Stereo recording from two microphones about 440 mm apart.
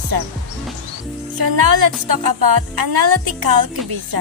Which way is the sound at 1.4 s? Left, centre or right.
Right.